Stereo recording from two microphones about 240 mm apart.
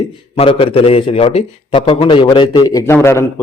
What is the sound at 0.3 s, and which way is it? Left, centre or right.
A man's voice, left.